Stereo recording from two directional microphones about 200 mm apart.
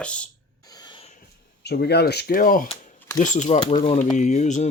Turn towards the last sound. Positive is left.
turn(degrees=35)  # may be behind; listen again after turning